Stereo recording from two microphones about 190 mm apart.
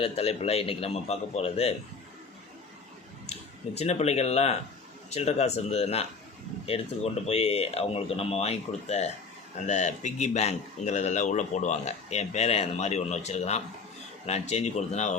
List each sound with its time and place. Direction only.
0.0 s speech: 30° left (ahead or behind)
3.8 s speech: 35° left (ahead or behind)